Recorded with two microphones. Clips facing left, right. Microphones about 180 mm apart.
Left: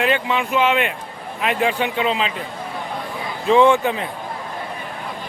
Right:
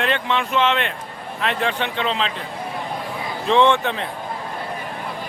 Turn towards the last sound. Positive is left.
turn(degrees=5)  # may be behind; listen again after turning